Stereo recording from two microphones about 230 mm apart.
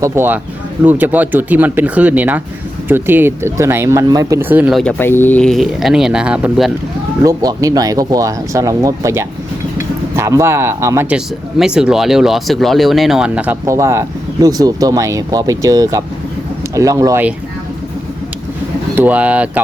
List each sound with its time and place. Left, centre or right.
0.0 s speech: centre
7.3 s speech: centre
18.9 s speech: centre